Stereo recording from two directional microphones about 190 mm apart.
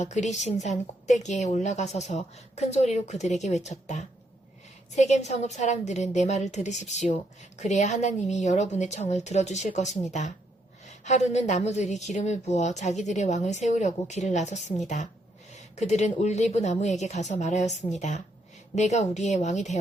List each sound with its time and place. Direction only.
0.0 s a woman's voice: 40° left (ahead or behind)